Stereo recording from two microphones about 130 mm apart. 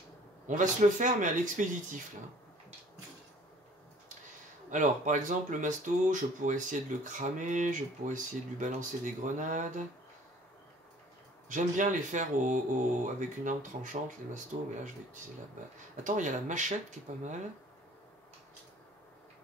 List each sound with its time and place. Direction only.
0.5 s speech: 80° right
4.6 s speech: 75° right (ahead or behind)
11.4 s speech: 80° right
16.0 s speech: 75° right (ahead or behind)